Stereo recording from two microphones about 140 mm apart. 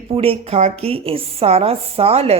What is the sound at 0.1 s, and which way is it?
Speech, 45° right (ahead or behind).